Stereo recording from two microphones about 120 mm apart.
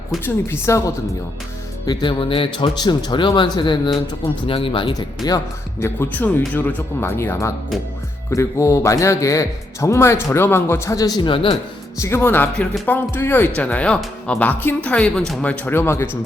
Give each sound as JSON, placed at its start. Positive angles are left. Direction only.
{"t": 0.3, "sound": "speech", "side_deg": 20}
{"t": 1.9, "sound": "speech", "side_deg": 40}
{"t": 4.9, "sound": "speech", "side_deg": 30}
{"t": 5.8, "sound": "speech", "side_deg": 15}
{"t": 11.9, "sound": "speech", "side_deg": 20}